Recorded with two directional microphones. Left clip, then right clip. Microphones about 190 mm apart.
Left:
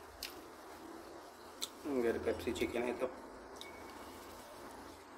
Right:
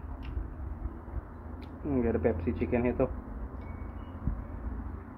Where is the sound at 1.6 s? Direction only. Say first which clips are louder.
Right 4 dB; 15° left (ahead or behind).